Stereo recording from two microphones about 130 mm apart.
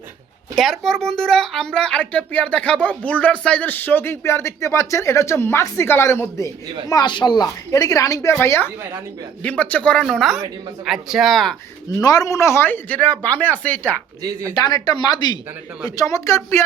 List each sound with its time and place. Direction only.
0.5 s speech: centre (ahead or behind); by 6.5 s 20° left (ahead or behind)
6.8 s a woman's voice: 35° left (ahead or behind); by 11.5 s centre (ahead or behind)
11.9 s speech: 30° left (ahead or behind)
14.2 s speech: 25° right (ahead or behind)
14.5 s a woman's voice: 30° left (ahead or behind)